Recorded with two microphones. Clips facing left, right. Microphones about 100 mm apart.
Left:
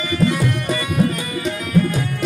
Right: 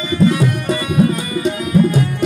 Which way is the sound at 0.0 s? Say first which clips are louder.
Right 4 dB; 20° right (ahead or behind).